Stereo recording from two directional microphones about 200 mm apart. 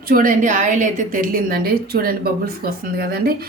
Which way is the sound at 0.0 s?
45° right (ahead or behind).